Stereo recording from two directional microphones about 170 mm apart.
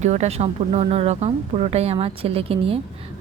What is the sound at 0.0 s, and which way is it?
Speech, 40° right (ahead or behind).